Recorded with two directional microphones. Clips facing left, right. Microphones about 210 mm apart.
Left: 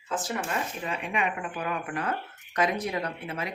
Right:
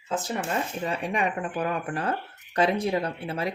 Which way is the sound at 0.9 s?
35° right (ahead or behind).